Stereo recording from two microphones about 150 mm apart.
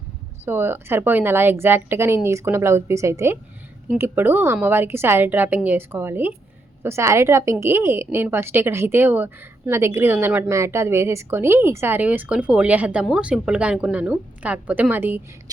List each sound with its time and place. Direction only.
0.4 s a woman's voice: 15° right (ahead or behind)